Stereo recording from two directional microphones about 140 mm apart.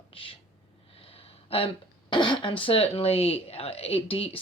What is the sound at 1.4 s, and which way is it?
Speech, 45° left (ahead or behind).